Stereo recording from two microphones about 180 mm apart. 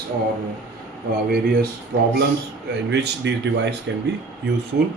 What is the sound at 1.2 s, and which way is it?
Speech, 55° right (ahead or behind).